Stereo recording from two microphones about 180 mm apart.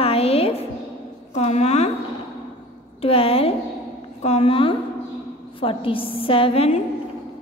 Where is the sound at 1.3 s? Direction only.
40° left (ahead or behind).